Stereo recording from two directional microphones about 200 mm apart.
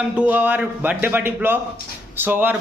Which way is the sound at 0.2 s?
10° right (ahead or behind).